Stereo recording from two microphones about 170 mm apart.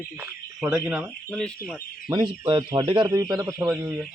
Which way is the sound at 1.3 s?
5° left (ahead or behind).